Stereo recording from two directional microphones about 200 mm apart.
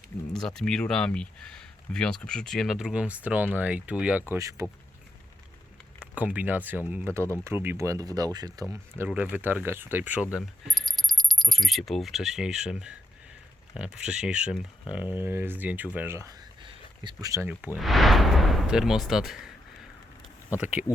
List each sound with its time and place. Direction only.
0.3 s speech: centre (ahead or behind); by 4.7 s 15° right (ahead or behind)
6.1 s speech: 10° right (ahead or behind)
16.0 s a sound: 15° right (ahead or behind)
17.7 s speech: centre (ahead or behind)
20.5 s speech: 5° right (ahead or behind)